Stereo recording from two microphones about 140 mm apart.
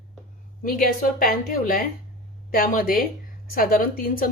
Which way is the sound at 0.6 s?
90° left.